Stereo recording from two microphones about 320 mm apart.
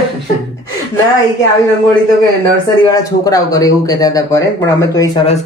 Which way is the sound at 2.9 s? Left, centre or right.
Centre.